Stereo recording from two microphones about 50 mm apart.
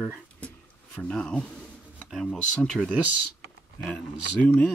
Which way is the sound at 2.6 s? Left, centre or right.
Centre.